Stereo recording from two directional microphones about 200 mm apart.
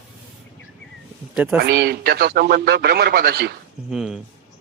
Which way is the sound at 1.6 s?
55° right (ahead or behind).